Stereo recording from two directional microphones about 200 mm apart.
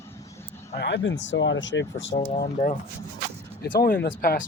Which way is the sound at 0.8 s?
65° left (ahead or behind).